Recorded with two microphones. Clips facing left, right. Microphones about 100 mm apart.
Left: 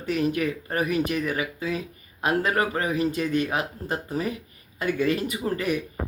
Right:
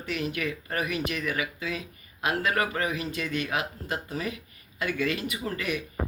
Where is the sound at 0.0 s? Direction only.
40° left (ahead or behind).